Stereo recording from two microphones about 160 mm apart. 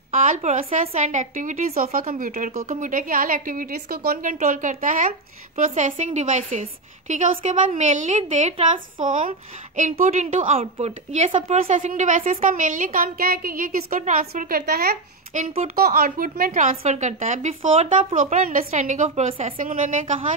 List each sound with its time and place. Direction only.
0.1 s a woman's voice: 45° right (ahead or behind)
9.0 s a woman's voice: 55° right (ahead or behind)